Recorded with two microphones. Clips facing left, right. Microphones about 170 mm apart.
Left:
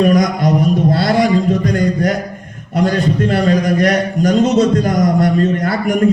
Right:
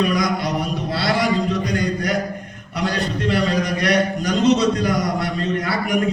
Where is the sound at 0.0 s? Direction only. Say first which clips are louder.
Left 7 dB; 45° left (ahead or behind).